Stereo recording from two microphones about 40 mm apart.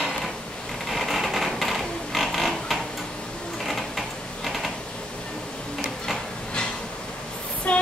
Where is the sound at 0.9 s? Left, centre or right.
Centre.